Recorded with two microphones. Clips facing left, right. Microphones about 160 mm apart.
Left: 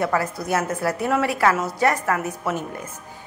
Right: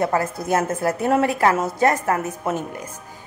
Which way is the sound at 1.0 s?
45° right (ahead or behind).